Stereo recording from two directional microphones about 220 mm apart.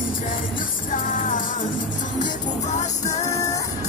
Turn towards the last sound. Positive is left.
turn(degrees=15)  # may be behind; listen again after turning